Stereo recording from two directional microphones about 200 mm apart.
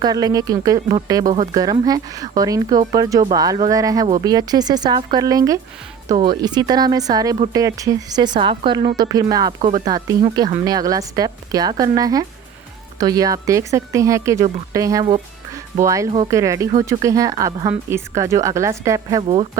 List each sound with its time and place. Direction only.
0.0 s speech: 20° right (ahead or behind)
9.6 s speech: 30° right (ahead or behind)
9.8 s speech: 20° right (ahead or behind)